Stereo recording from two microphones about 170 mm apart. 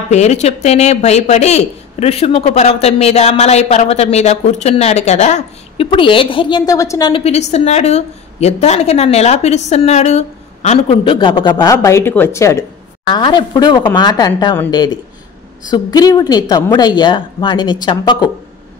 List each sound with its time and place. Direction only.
0.1 s a woman's voice: 40° left (ahead or behind)
5.9 s a woman's voice: 30° left (ahead or behind)
11.1 s a woman's voice: 30° left (ahead or behind)
15.7 s a woman's voice: 20° left (ahead or behind)